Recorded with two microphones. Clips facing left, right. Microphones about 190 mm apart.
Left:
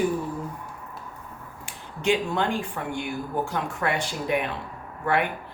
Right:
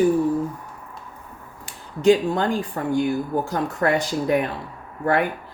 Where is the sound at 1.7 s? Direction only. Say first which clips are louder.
Right 8 dB; 35° right (ahead or behind).